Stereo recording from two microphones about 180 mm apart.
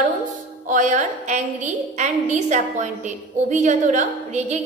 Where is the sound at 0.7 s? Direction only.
45° right (ahead or behind).